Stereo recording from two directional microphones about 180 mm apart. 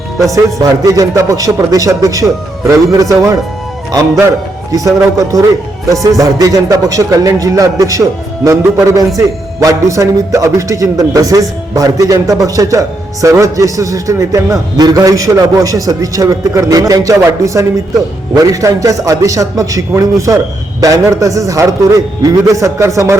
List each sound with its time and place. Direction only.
0.2 s speech: 20° right (ahead or behind)
4.7 s a man's voice: 20° right (ahead or behind)